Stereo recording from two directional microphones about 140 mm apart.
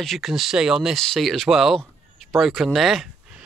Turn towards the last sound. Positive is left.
turn(degrees=0)  # may be behind; listen again after turning